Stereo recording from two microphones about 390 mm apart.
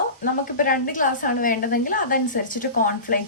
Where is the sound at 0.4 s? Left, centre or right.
Left.